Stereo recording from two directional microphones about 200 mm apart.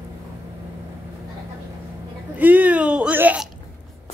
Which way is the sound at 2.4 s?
10° right (ahead or behind).